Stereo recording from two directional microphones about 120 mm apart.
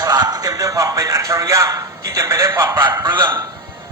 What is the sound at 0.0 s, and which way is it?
Speech, 35° right (ahead or behind).